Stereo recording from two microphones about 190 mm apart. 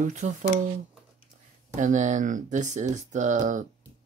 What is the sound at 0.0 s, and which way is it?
Speech, 40° right (ahead or behind).